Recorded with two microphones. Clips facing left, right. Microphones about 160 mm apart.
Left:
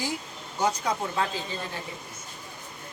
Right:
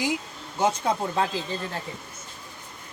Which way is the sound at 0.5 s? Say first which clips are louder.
Right 3 dB; 20° right (ahead or behind).